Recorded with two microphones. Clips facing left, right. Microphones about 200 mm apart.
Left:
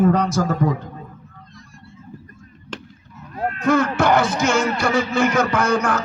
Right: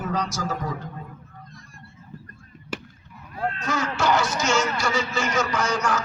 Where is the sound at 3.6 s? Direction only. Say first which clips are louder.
Left 11 dB; 55° left (ahead or behind).